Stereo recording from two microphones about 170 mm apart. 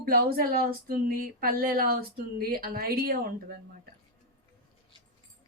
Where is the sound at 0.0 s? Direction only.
60° right (ahead or behind).